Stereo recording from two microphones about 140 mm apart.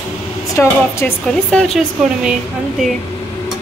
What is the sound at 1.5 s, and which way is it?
Speech, centre (ahead or behind).